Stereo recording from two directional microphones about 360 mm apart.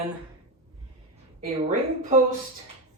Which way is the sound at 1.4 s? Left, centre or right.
Centre.